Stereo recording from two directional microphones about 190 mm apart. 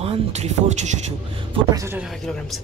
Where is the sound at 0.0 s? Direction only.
35° right (ahead or behind).